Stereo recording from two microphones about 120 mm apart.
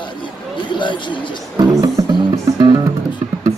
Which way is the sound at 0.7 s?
40° left (ahead or behind).